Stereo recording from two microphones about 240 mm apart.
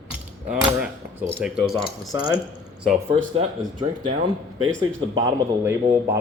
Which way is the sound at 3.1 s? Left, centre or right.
Right.